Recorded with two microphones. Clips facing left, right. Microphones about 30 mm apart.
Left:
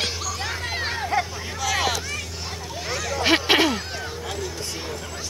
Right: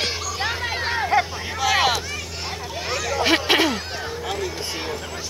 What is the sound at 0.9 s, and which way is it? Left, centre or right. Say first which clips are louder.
Vehicle: right 6 dB; centre.